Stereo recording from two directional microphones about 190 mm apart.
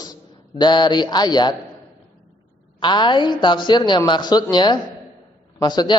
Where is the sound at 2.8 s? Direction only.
25° left (ahead or behind).